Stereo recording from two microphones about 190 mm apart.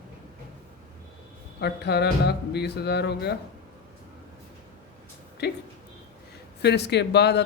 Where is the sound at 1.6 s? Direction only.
60° left (ahead or behind).